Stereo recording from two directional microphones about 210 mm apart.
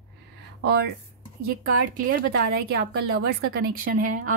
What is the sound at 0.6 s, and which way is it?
Speech, 50° right (ahead or behind).